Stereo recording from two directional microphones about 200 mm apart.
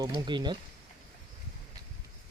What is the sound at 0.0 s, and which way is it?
Speech, 20° right (ahead or behind).